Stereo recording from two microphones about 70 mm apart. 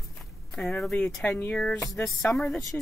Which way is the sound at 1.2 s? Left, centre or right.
Left.